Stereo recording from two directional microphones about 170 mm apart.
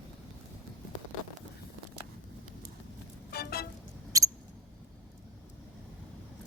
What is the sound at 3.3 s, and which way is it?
Vehicle, 65° left (ahead or behind).